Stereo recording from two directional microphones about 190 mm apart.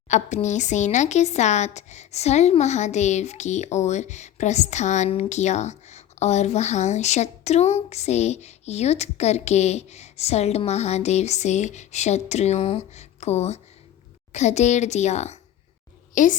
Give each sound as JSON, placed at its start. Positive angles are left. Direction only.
{"t": 0.1, "sound": "a child's voice", "side_deg": 40}